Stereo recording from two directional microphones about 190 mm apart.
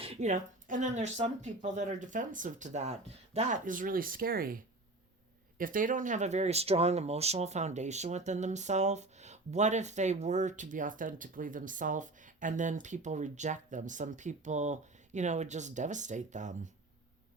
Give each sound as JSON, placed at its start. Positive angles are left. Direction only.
{"t": 0.0, "sound": "speech", "side_deg": -35}